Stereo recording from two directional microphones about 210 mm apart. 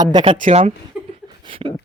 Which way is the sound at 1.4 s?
25° right (ahead or behind).